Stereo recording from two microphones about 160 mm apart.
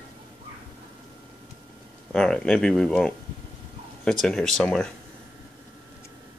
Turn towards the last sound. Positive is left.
turn(degrees=5)  # may be behind; listen again after turning